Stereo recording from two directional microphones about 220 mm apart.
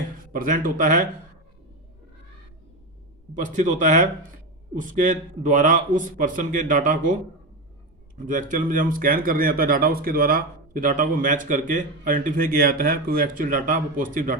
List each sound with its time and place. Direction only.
0.3 s speech: 40° right (ahead or behind)
3.3 s speech: 35° right (ahead or behind)
8.3 s speech: 35° right (ahead or behind)